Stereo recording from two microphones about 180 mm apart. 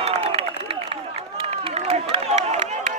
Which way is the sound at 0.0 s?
35° right (ahead or behind).